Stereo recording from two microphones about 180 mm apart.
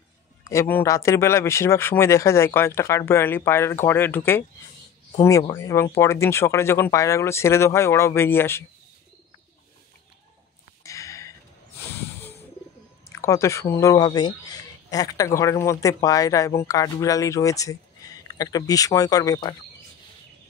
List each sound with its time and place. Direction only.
0.4 s a man's voice: 15° left (ahead or behind)
10.8 s a sound: 15° left (ahead or behind)
11.9 s snake: 10° left (ahead or behind)
13.1 s speech: 15° left (ahead or behind)